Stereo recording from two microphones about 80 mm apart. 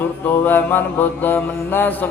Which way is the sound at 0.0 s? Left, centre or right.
Left.